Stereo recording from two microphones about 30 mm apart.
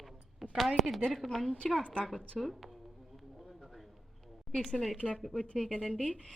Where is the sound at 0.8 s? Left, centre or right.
Centre.